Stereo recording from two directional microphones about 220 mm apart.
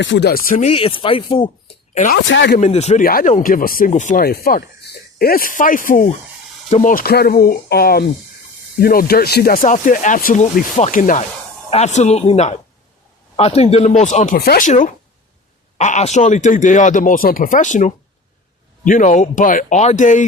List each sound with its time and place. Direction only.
0.0 s speech: 55° left (ahead or behind)
0.7 s speech: 25° left (ahead or behind)
1.9 s speech: 35° left (ahead or behind)
2.1 s speech: 55° left (ahead or behind)
2.6 s speech: 30° left (ahead or behind)
3.0 s speech: 40° left (ahead or behind)
15.8 s speech: 30° left (ahead or behind)